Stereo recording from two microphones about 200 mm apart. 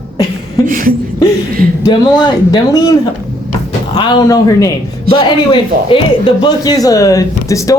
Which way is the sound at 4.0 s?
20° left (ahead or behind).